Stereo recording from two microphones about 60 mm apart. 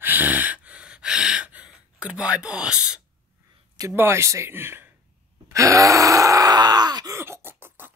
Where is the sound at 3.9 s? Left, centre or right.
Right.